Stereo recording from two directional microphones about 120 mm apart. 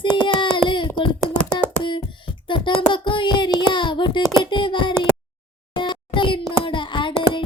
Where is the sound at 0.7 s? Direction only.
40° left (ahead or behind).